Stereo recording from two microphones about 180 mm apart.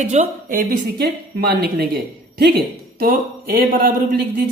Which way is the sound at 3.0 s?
55° right (ahead or behind).